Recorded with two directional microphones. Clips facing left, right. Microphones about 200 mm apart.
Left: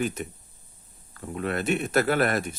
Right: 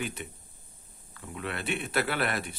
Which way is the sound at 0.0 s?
45° left (ahead or behind).